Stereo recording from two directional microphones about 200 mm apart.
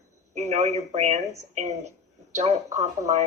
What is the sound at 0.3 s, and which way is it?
A woman's voice, 35° right (ahead or behind).